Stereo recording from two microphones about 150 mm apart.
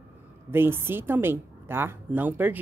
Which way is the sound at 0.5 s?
15° right (ahead or behind).